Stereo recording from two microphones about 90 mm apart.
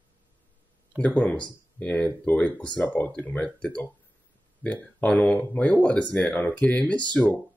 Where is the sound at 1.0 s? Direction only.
15° left (ahead or behind).